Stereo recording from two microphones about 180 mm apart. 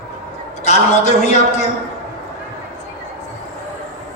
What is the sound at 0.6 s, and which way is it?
Speech, 40° left (ahead or behind).